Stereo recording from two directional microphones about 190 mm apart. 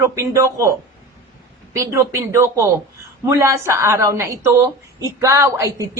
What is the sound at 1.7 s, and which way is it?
A woman's voice, 15° right (ahead or behind).